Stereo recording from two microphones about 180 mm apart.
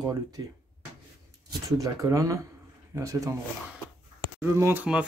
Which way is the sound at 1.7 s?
20° right (ahead or behind).